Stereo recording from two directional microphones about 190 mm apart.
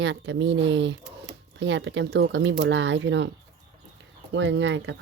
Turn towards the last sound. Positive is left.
turn(degrees=-70)  # may be behind; listen again after turning